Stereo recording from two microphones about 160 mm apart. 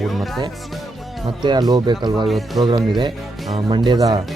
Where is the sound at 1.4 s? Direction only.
25° right (ahead or behind).